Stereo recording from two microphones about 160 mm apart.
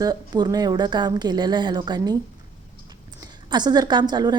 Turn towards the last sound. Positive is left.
turn(degrees=-25)  # may be behind; listen again after turning